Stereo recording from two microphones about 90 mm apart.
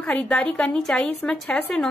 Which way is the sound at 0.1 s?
15° left (ahead or behind).